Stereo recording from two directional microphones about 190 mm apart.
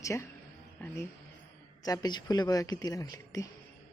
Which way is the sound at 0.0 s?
15° left (ahead or behind).